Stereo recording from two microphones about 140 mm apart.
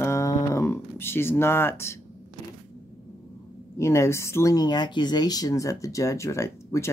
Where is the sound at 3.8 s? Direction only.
20° left (ahead or behind).